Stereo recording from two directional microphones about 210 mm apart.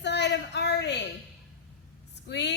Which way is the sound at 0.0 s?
55° left (ahead or behind).